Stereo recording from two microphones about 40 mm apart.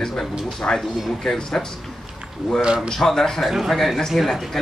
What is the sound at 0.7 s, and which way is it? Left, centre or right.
Speech, centre.